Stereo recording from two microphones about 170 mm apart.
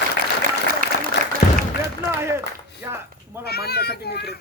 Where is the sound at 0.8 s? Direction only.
55° right (ahead or behind).